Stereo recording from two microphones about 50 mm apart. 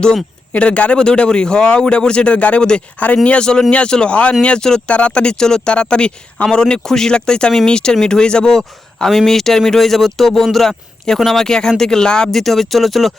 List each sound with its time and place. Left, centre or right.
0.5 s a man's voice: left
12.3 s speech: centre